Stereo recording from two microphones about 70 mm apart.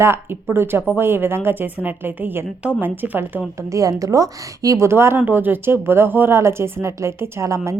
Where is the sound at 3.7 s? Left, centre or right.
Right.